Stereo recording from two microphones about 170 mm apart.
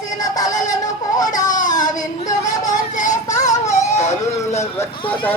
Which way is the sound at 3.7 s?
45° left (ahead or behind).